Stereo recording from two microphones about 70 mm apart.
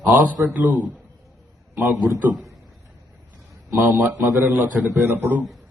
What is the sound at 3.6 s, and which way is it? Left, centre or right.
A man's voice, right.